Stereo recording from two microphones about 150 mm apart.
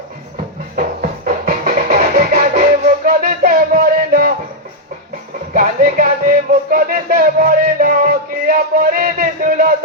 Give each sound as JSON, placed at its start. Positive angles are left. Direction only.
{"t": 0.8, "sound": "music", "side_deg": -60}
{"t": 5.5, "sound": "music", "side_deg": -65}